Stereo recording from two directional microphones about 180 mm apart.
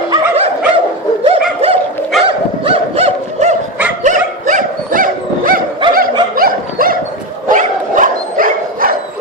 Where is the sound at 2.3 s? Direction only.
30° right (ahead or behind).